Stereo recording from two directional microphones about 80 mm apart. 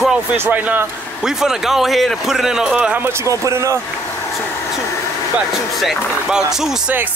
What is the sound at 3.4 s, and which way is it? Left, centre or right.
Speech, right.